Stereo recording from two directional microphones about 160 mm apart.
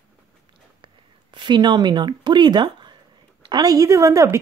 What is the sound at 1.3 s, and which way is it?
Speech, 30° right (ahead or behind).